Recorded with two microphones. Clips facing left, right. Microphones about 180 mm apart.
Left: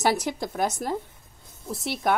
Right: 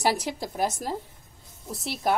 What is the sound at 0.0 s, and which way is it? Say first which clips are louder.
Speech: left 2 dB; 35° right (ahead or behind).